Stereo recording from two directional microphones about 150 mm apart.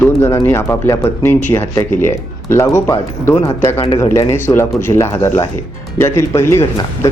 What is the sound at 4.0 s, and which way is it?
Speech, 20° left (ahead or behind).